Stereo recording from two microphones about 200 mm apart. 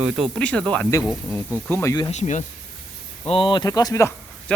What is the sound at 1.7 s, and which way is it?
Speech, 15° left (ahead or behind).